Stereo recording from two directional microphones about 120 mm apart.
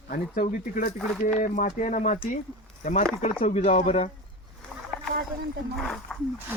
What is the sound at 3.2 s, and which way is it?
Speech, 70° left (ahead or behind).